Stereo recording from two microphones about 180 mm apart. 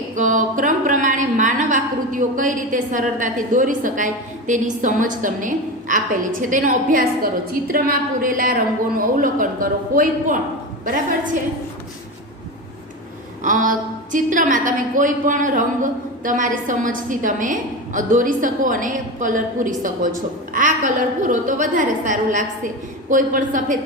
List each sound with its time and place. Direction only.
0.2 s a woman's voice: 45° right (ahead or behind)
13.4 s a woman's voice: 45° right (ahead or behind)